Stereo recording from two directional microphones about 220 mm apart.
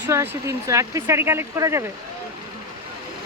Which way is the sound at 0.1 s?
10° right (ahead or behind).